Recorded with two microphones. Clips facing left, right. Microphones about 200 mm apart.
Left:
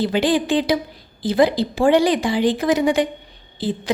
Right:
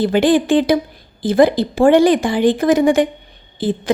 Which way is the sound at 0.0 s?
50° right (ahead or behind).